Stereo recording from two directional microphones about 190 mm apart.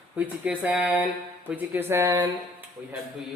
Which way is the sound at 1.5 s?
10° right (ahead or behind).